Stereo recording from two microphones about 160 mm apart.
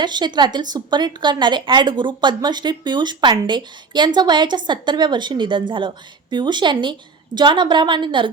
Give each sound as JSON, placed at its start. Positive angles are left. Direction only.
{"t": 0.0, "sound": "a woman's voice", "side_deg": -30}